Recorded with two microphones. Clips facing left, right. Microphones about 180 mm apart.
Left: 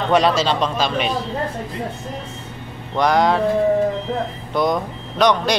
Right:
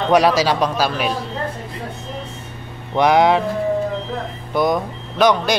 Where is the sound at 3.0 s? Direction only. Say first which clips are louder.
Right 2 dB; 10° right (ahead or behind).